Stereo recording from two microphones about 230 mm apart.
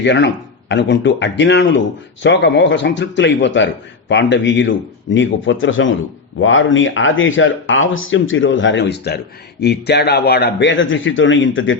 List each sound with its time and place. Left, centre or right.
0.0 s a man's voice: left